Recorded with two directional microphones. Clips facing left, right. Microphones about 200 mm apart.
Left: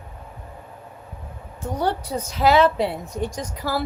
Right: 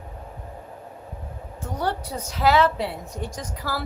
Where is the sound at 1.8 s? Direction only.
20° left (ahead or behind).